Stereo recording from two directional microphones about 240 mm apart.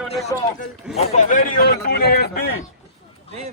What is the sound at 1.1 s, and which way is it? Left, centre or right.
Speech, left.